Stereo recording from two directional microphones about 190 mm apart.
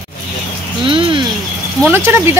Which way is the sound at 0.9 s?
25° right (ahead or behind).